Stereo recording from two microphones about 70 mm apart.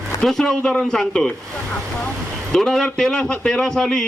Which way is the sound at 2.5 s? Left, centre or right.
Centre.